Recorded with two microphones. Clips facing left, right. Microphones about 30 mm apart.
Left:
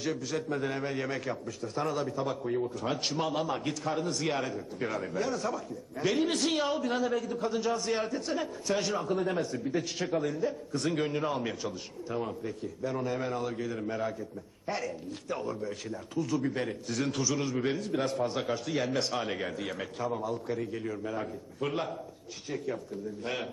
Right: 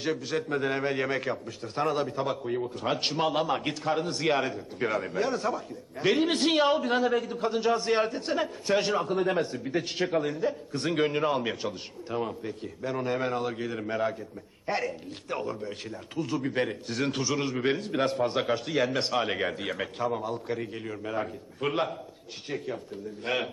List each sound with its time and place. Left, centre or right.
0.0 s a man's voice: right
2.4 s a man's voice: right
18.7 s speech: centre
19.2 s a man's voice: right